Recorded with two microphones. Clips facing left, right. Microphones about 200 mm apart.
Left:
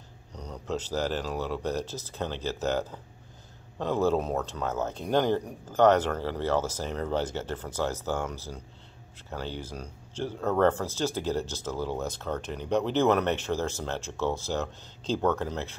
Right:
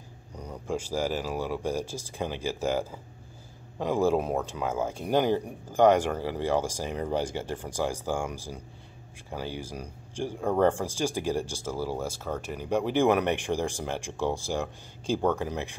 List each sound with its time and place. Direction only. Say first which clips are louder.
0.3 s speech: right 1 dB; 10° right (ahead or behind)